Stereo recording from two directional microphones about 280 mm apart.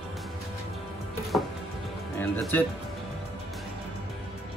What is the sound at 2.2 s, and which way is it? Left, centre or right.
Speech, centre.